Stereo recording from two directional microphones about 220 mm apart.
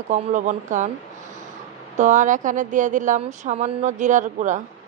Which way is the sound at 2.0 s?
35° right (ahead or behind).